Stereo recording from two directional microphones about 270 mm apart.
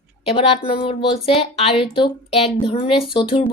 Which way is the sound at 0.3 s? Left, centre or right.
Centre.